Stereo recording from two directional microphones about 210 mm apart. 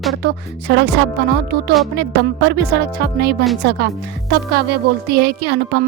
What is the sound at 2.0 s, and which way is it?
A woman's voice, 50° right (ahead or behind).